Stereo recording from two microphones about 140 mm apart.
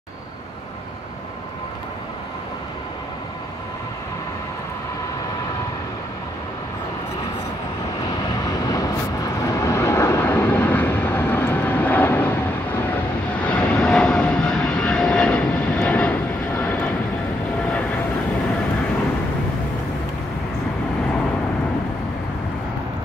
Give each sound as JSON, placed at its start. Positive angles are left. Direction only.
{"t": 8.2, "sound": "vehicle", "side_deg": 25}